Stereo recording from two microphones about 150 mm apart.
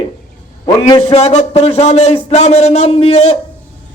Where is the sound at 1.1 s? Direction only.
45° left (ahead or behind).